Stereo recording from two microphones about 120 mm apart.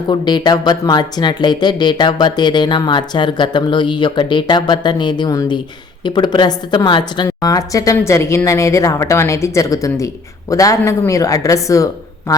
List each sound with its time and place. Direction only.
0.1 s speech: 35° left (ahead or behind)